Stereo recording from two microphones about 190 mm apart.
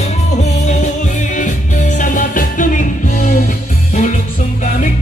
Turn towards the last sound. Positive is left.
turn(degrees=40)  # may be behind; listen again after turning